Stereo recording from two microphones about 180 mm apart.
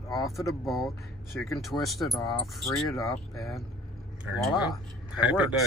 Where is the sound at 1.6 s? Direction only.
Centre (ahead or behind).